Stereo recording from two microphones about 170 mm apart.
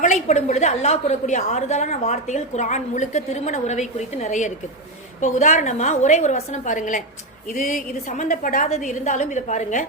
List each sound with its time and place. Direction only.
0.0 s a woman's voice: 45° left (ahead or behind)